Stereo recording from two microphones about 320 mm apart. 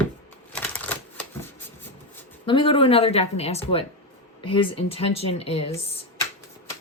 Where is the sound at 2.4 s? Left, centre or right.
Centre.